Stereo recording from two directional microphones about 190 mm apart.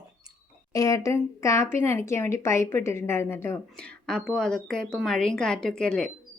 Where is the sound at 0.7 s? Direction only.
15° left (ahead or behind).